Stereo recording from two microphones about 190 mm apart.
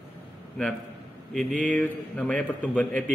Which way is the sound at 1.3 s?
5° left (ahead or behind).